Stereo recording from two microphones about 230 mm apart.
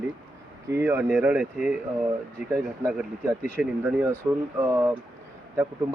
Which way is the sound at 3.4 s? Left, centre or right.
Centre.